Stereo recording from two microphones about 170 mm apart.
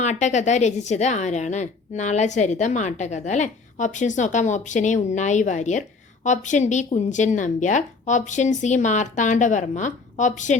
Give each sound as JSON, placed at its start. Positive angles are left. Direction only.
{"t": 0.0, "sound": "a woman's voice", "side_deg": 45}